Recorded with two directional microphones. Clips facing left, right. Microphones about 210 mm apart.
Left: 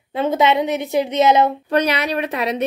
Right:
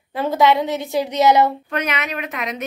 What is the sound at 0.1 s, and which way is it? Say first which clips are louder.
A woman's voice: even; 20° left (ahead or behind).